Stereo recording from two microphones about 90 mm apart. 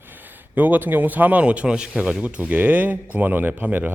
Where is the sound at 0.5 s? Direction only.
20° right (ahead or behind).